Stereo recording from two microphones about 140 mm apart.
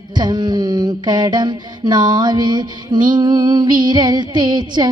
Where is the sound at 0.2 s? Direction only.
30° right (ahead or behind).